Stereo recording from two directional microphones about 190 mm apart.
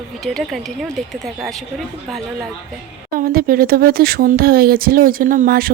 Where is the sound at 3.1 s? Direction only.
50° right (ahead or behind).